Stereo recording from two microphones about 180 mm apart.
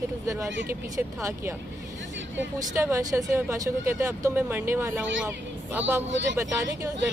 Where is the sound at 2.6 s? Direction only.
15° right (ahead or behind).